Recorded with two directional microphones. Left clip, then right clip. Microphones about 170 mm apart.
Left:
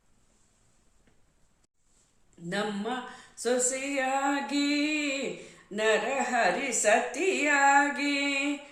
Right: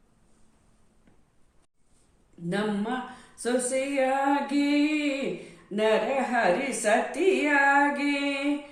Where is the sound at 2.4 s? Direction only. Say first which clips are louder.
Right 2 dB; 20° left (ahead or behind).